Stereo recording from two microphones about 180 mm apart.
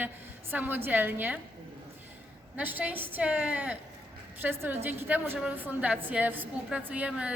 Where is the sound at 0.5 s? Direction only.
10° right (ahead or behind).